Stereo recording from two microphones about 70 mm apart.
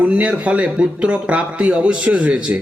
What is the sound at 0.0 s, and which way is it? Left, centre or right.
A man's voice, centre.